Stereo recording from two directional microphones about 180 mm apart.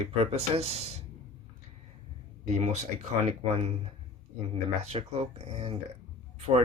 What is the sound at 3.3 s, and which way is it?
Speech, 35° right (ahead or behind).